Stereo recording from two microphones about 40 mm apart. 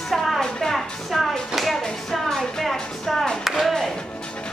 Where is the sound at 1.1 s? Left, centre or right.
Centre.